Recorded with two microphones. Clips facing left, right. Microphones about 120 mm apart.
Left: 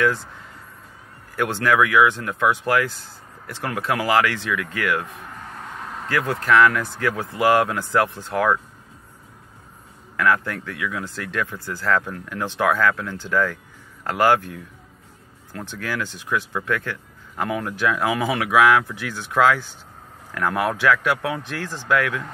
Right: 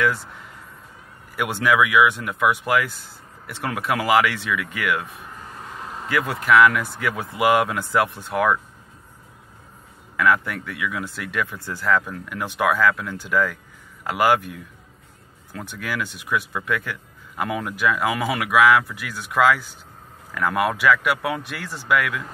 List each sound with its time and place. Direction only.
1.3 s speech: 10° right (ahead or behind)
5.7 s a sound: centre (ahead or behind)
6.0 s speech: 10° right (ahead or behind)
10.1 s speech: 10° right (ahead or behind)
15.5 s speech: 10° right (ahead or behind)